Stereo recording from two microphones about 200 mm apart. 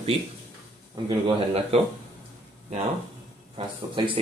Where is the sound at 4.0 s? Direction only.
25° right (ahead or behind).